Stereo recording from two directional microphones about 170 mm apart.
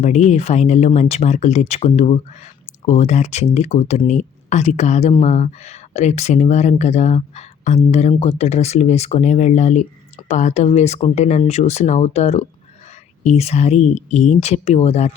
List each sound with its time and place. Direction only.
0.0 s speech: 45° left (ahead or behind)